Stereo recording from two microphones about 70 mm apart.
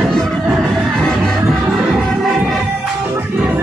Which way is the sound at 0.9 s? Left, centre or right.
Centre.